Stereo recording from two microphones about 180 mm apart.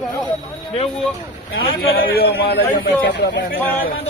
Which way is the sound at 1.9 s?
60° left (ahead or behind).